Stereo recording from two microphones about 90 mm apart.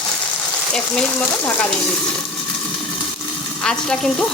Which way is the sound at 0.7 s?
10° left (ahead or behind).